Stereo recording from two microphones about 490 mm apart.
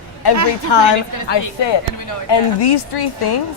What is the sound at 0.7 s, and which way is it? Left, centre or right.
Speech, left.